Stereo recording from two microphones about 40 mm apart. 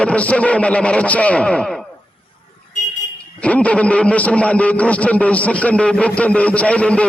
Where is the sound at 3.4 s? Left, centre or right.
Left.